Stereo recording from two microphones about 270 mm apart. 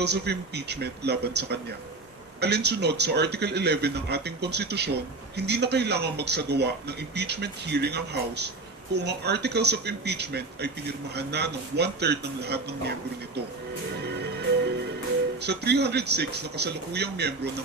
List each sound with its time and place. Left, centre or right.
0.0 s speech: right
14.0 s music: right
15.4 s speech: right